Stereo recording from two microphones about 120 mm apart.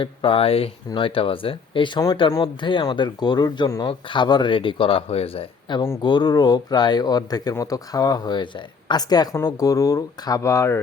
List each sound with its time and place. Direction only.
0.0 s speech: 45° left (ahead or behind); by 10.8 s 25° left (ahead or behind)